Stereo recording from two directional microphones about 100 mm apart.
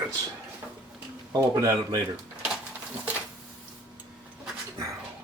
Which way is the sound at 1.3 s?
35° right (ahead or behind).